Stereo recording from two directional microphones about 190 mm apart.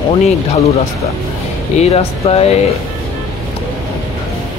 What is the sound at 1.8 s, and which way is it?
Speech, 30° left (ahead or behind).